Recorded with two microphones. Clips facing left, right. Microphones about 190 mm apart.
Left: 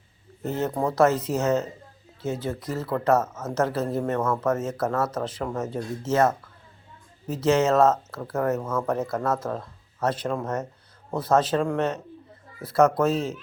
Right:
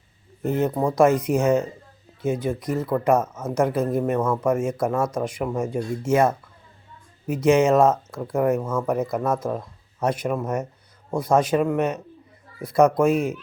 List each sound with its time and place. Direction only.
0.4 s speech: 15° right (ahead or behind)